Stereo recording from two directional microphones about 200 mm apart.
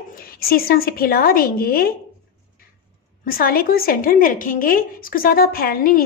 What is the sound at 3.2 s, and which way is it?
A woman's voice, 45° left (ahead or behind).